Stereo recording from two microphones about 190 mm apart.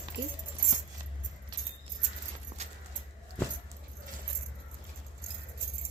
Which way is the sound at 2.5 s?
35° right (ahead or behind).